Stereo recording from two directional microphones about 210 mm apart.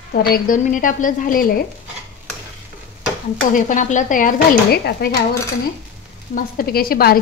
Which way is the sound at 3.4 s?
40° left (ahead or behind).